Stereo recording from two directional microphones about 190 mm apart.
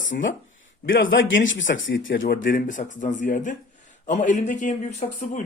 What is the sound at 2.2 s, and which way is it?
A man's voice, 50° left (ahead or behind).